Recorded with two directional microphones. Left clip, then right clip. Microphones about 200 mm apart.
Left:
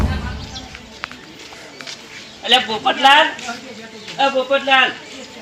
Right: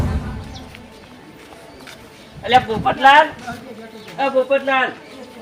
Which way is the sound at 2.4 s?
15° right (ahead or behind).